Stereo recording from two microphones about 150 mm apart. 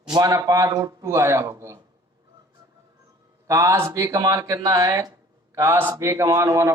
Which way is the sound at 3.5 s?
20° right (ahead or behind).